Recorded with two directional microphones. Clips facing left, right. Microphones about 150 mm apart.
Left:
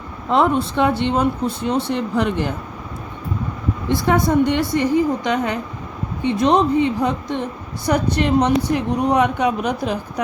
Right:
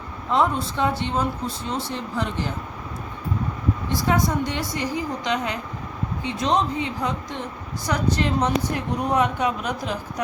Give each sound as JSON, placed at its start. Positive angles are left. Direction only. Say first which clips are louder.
{"t": 0.3, "sound": "speech", "louder": "left 5 dB", "side_deg": 65}
{"t": 3.8, "sound": "speech", "louder": "left 6 dB", "side_deg": 60}